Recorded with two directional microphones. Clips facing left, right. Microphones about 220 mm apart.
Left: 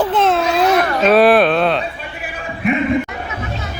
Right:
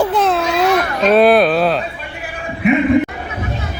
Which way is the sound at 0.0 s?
5° right (ahead or behind).